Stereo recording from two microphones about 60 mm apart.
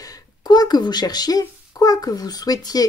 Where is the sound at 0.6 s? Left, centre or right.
Left.